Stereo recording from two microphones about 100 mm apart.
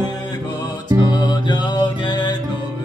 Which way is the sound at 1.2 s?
50° left (ahead or behind).